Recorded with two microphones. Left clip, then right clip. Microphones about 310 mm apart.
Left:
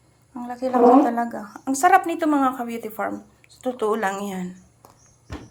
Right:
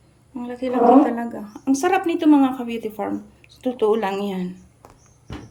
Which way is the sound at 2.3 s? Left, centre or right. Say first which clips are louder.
Right 5 dB; centre.